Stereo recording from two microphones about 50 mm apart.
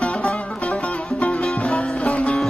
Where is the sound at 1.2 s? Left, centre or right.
Left.